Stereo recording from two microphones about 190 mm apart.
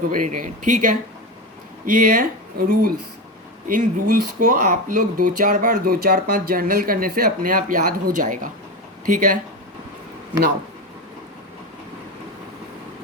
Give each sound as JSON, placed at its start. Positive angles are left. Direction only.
{"t": 0.1, "sound": "speech", "side_deg": -45}